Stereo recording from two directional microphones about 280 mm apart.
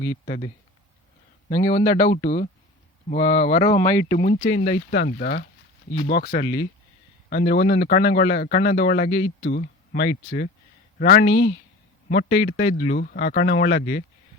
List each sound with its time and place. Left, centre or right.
0.3 s speech: left
3.8 s speech: centre
4.1 s speech: left
9.4 s speech: left
12.3 s speech: left